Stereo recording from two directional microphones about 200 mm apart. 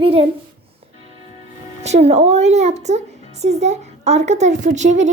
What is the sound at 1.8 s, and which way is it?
A woman's voice, 30° right (ahead or behind).